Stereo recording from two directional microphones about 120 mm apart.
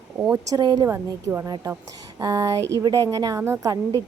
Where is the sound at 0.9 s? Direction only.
25° right (ahead or behind).